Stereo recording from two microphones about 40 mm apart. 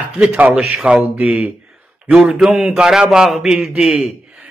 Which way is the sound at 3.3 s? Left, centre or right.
Centre.